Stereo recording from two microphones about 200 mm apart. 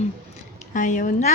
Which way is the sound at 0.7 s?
40° left (ahead or behind).